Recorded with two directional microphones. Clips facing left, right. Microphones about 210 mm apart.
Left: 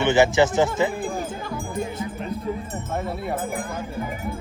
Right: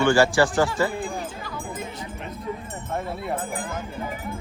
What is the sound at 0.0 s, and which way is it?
Speech, 20° left (ahead or behind).